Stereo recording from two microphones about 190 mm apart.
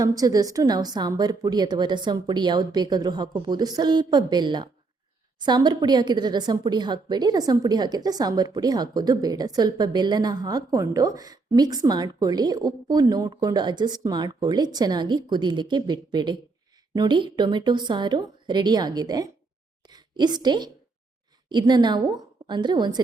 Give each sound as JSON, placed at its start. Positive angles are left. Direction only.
{"t": 0.0, "sound": "a woman's voice", "side_deg": -20}